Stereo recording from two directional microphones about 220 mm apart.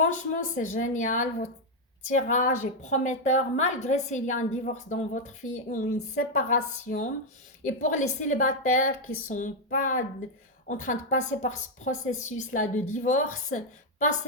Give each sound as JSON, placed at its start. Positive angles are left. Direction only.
{"t": 0.0, "sound": "a woman's voice", "side_deg": 35}